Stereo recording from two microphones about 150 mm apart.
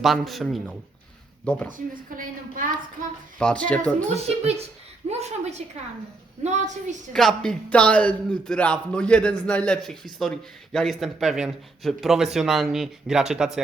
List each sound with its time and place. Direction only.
0.0 s a man's voice: centre (ahead or behind)
1.7 s a woman's voice: 65° right (ahead or behind)
3.3 s speech: 5° left (ahead or behind)
4.1 s a woman's voice: 45° right (ahead or behind)
7.1 s a man's voice: centre (ahead or behind)